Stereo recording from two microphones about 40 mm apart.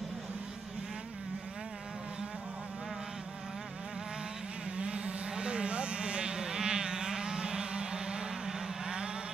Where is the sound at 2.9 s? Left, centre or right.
Centre.